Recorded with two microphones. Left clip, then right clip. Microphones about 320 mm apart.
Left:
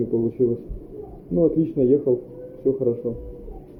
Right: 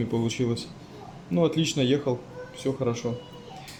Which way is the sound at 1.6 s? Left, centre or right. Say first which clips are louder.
Left 4 dB; centre.